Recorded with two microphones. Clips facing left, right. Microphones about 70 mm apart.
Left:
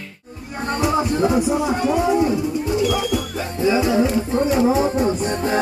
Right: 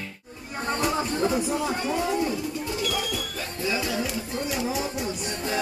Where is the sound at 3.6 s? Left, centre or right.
Left.